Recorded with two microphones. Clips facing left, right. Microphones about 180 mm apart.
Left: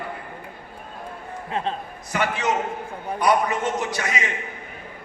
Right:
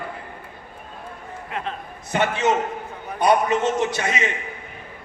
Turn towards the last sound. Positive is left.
turn(degrees=-25)  # may be behind; listen again after turning